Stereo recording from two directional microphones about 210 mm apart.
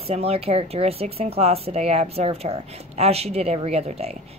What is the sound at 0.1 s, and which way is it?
Speech, 30° right (ahead or behind).